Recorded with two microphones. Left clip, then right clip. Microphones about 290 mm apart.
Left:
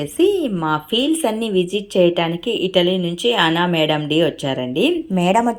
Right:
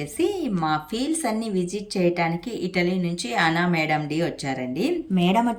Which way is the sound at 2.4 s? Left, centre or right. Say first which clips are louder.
Left 10 dB; centre.